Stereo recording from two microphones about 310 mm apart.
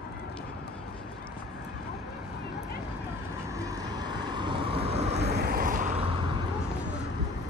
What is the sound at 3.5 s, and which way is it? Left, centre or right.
Vehicle, centre.